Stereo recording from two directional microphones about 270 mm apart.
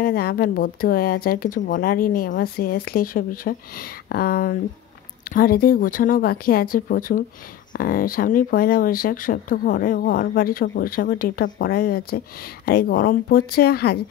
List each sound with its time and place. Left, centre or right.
0.0 s speech: left